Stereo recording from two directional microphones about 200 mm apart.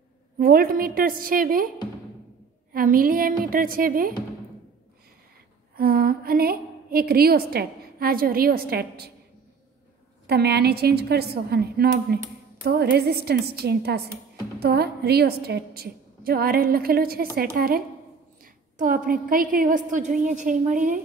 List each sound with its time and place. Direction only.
0.4 s a woman's voice: 45° right (ahead or behind)
2.7 s a woman's voice: 45° right (ahead or behind)
5.8 s a woman's voice: 50° right (ahead or behind)
10.2 s a woman's voice: 55° right (ahead or behind)